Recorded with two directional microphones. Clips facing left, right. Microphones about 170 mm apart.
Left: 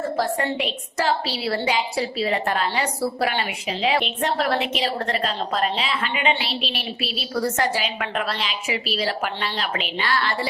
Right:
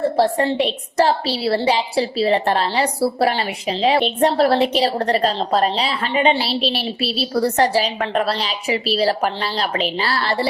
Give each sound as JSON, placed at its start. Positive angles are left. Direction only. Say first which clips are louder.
{"t": 0.0, "sound": "a woman's voice", "louder": "right 6 dB", "side_deg": -30}